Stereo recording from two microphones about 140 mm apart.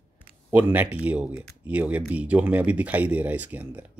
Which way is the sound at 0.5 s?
10° right (ahead or behind).